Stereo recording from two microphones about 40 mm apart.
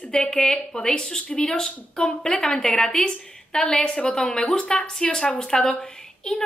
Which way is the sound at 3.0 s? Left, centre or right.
Left.